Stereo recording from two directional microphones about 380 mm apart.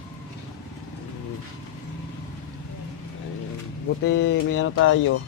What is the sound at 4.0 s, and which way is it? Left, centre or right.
Speech, left.